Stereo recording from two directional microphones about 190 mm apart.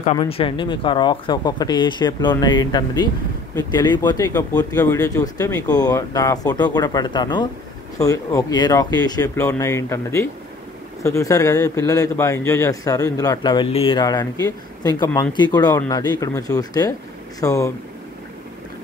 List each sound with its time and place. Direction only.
0.0 s speech: 30° left (ahead or behind)